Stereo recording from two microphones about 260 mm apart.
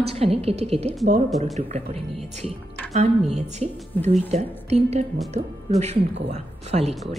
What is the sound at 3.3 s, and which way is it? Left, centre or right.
Speech, right.